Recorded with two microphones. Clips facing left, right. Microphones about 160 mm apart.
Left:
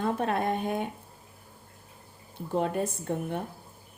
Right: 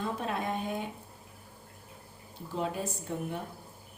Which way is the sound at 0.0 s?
55° left (ahead or behind).